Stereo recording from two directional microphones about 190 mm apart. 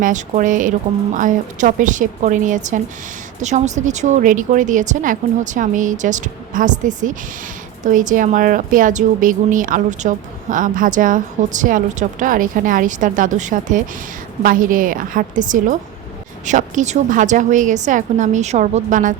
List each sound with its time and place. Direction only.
0.0 s a woman's voice: 45° right (ahead or behind)